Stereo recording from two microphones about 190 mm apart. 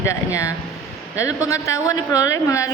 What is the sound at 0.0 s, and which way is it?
A woman's voice, 15° left (ahead or behind).